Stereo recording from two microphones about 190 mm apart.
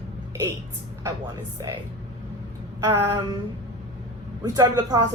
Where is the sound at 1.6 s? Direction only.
20° right (ahead or behind).